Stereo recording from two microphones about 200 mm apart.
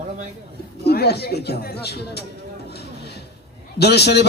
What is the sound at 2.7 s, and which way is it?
Music, 55° left (ahead or behind).